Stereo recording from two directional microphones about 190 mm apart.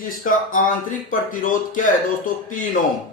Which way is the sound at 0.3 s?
45° left (ahead or behind).